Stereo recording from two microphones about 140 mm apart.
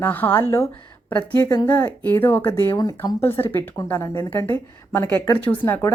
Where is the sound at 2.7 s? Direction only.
30° left (ahead or behind).